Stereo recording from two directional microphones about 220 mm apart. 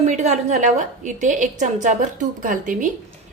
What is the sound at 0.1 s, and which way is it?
A woman's voice, 35° right (ahead or behind).